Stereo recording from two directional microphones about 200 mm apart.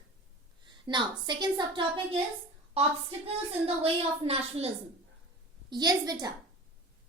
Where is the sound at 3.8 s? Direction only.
30° right (ahead or behind).